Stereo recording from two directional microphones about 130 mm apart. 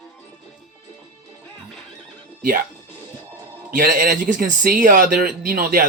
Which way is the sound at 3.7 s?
90° right.